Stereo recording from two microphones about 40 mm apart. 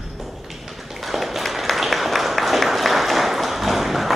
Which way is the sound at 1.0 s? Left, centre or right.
Centre.